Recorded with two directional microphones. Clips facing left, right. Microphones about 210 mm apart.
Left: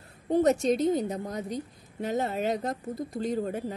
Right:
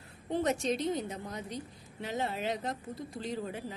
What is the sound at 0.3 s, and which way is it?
A woman's voice, 40° left (ahead or behind).